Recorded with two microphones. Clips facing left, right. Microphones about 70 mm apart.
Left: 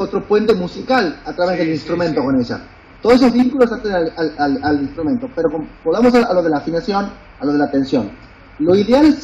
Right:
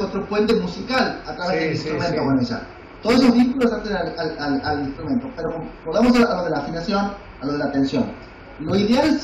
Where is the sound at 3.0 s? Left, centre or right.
Left.